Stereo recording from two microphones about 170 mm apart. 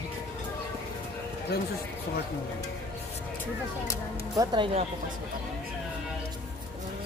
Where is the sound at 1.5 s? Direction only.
65° left (ahead or behind).